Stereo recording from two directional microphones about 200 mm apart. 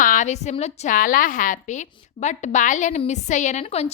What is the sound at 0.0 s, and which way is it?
A woman's voice, 40° left (ahead or behind).